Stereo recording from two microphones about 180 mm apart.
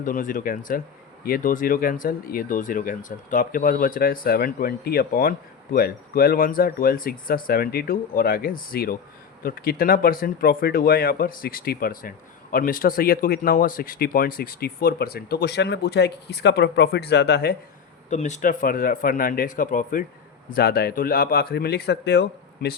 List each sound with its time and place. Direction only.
0.0 s speech: 50° left (ahead or behind)
18.1 s speech: 40° left (ahead or behind)
20.5 s speech: 60° left (ahead or behind)